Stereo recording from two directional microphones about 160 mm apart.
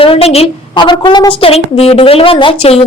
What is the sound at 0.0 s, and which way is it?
A woman's voice, 35° left (ahead or behind).